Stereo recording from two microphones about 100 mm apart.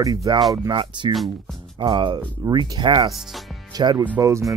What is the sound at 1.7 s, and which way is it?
Speech, 55° right (ahead or behind).